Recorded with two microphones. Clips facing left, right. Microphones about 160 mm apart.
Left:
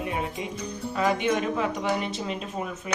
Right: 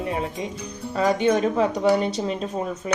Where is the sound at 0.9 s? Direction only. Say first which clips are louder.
Right 5 dB; 35° right (ahead or behind).